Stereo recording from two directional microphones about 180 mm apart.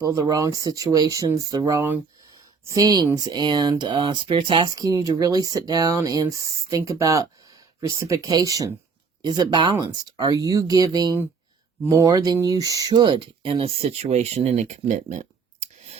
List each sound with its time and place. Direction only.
0.0 s speech: 20° right (ahead or behind); by 16.0 s 40° right (ahead or behind)